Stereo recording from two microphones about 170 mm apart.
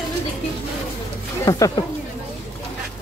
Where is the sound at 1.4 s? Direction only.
20° left (ahead or behind).